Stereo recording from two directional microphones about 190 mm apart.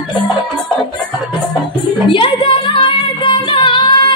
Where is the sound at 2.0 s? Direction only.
25° left (ahead or behind).